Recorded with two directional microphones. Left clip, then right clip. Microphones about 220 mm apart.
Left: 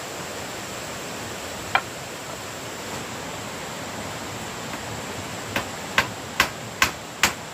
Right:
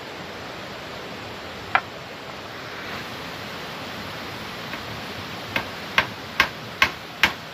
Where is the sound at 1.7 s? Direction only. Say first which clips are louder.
Right 1 dB; 5° right (ahead or behind).